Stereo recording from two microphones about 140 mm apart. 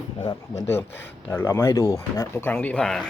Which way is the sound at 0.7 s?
15° left (ahead or behind).